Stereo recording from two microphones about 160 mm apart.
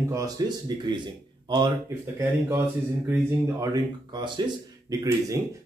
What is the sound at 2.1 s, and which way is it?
Speech, 15° right (ahead or behind).